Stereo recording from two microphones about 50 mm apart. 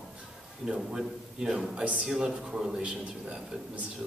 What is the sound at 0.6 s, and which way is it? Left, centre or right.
A man's voice, centre.